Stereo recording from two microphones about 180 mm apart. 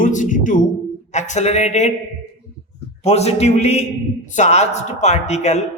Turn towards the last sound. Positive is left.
turn(degrees=40)  # may be behind; listen again after turning